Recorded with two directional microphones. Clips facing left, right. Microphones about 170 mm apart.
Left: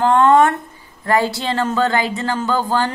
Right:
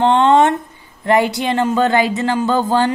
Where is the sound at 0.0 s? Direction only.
25° right (ahead or behind).